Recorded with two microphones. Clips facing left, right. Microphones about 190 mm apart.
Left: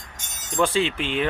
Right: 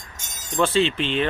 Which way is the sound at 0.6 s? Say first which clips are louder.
Right 2 dB; 10° left (ahead or behind).